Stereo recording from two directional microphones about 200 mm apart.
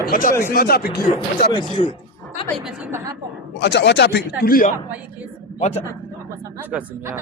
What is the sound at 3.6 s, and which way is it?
A man's voice, 55° left (ahead or behind).